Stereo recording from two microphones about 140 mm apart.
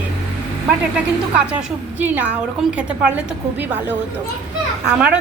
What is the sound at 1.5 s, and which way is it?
A woman's voice, 10° right (ahead or behind).